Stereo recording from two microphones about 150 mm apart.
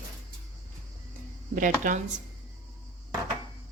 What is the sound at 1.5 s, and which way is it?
Speech, 60° right (ahead or behind).